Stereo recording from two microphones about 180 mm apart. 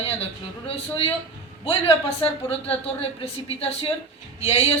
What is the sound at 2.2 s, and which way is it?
Speech, 30° left (ahead or behind).